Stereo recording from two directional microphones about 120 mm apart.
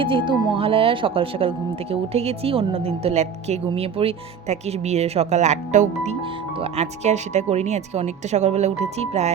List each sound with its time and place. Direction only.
0.0 s speech: 45° right (ahead or behind); by 9.3 s 65° right (ahead or behind)